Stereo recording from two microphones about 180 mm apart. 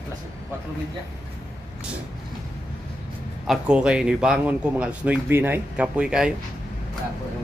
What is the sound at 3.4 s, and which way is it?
Speech, 5° right (ahead or behind).